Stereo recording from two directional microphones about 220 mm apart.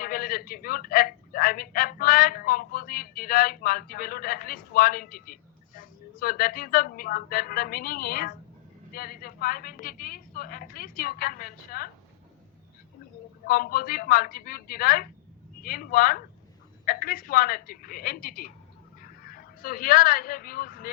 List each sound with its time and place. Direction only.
0.0 s a woman's voice: 40° left (ahead or behind)
13.5 s a woman's voice: 40° left (ahead or behind)